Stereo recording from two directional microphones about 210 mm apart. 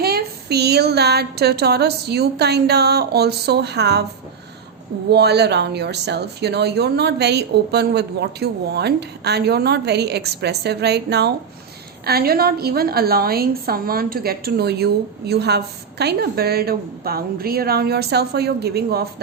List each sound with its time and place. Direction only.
0.0 s a woman's voice: 50° right (ahead or behind)
5.1 s a woman's voice: 50° right (ahead or behind)